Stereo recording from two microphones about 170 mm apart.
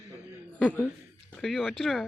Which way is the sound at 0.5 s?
5° left (ahead or behind).